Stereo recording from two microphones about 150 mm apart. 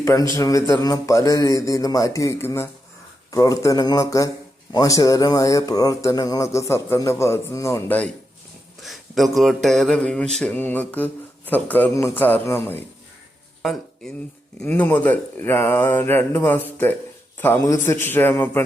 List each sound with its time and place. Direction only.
0.0 s speech: 20° left (ahead or behind)
8.8 s speech: centre (ahead or behind); by 12.8 s 15° left (ahead or behind)
13.6 s a sound: centre (ahead or behind)
14.6 s speech: 10° left (ahead or behind)